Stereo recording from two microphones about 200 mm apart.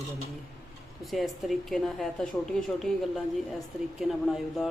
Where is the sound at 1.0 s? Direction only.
Centre (ahead or behind).